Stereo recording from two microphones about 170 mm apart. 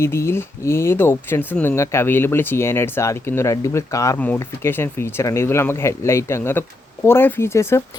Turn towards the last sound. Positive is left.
turn(degrees=15)  # may be behind; listen again after turning